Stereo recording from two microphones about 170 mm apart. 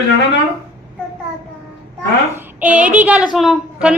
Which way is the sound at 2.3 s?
10° right (ahead or behind).